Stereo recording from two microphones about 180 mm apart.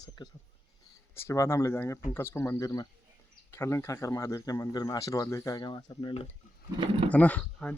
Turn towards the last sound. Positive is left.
turn(degrees=10)  # may be behind; listen again after turning